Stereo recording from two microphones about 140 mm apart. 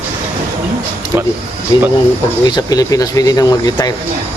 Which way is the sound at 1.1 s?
25° right (ahead or behind).